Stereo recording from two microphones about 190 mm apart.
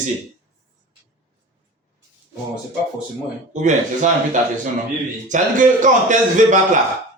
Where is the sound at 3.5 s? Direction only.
40° right (ahead or behind).